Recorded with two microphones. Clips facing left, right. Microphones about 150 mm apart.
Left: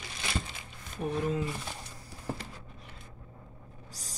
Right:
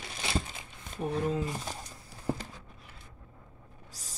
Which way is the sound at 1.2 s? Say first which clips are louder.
Even; 35° right (ahead or behind).